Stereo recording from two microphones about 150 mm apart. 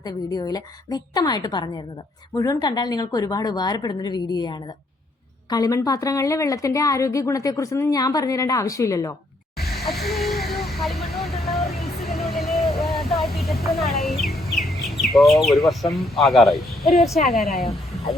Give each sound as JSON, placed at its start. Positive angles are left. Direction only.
{"t": 0.0, "sound": "a woman's voice", "side_deg": 25}
{"t": 9.6, "sound": "vehicle", "side_deg": 0}
{"t": 12.8, "sound": "a sound", "side_deg": 0}
{"t": 14.5, "sound": "bird", "side_deg": 0}
{"t": 14.8, "sound": "speech", "side_deg": 0}